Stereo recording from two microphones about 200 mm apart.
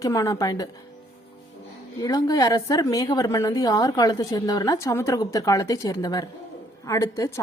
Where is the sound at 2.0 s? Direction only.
20° left (ahead or behind).